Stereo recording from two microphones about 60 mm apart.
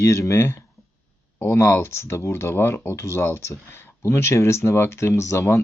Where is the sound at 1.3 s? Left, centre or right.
Left.